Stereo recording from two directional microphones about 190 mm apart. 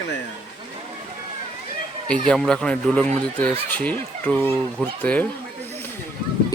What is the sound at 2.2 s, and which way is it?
Speech, 5° left (ahead or behind).